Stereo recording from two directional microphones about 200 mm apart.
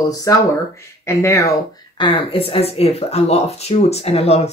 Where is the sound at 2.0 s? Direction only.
25° left (ahead or behind).